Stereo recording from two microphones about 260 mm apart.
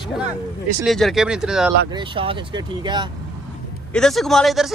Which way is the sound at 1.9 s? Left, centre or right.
Centre.